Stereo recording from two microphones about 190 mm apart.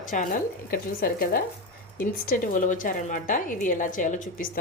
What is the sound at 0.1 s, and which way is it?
A woman's voice, 40° left (ahead or behind).